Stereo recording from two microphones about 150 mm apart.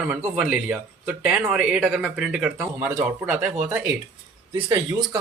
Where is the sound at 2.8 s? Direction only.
15° right (ahead or behind).